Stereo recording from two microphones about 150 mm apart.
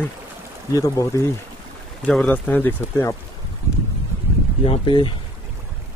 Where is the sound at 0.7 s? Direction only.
25° left (ahead or behind).